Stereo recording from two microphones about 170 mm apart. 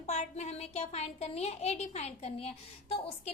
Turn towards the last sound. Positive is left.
turn(degrees=35)  # may be behind; listen again after turning